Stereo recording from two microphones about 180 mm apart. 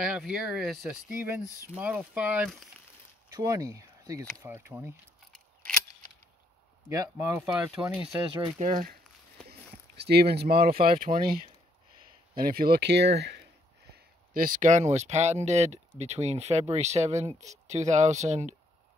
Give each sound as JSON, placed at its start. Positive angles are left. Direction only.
{"t": 0.0, "sound": "speech", "side_deg": -5}
{"t": 1.4, "sound": "speech", "side_deg": 15}
{"t": 1.8, "sound": "speech", "side_deg": -10}
{"t": 3.3, "sound": "speech", "side_deg": -20}
{"t": 6.9, "sound": "speech", "side_deg": -15}
{"t": 7.9, "sound": "speech", "side_deg": -5}
{"t": 8.5, "sound": "speech", "side_deg": -50}
{"t": 9.5, "sound": "speech", "side_deg": -65}
{"t": 13.9, "sound": "speech", "side_deg": -50}